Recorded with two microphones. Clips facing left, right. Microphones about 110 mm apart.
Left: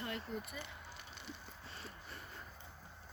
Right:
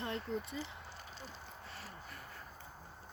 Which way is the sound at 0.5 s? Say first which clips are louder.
Right 4 dB; 70° left (ahead or behind).